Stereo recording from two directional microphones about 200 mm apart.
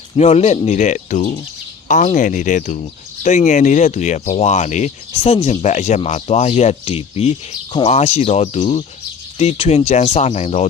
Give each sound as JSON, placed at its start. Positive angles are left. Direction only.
{"t": 0.2, "sound": "speech", "side_deg": 30}